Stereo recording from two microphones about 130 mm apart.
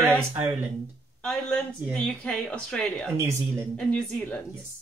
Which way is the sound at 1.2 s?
5° left (ahead or behind).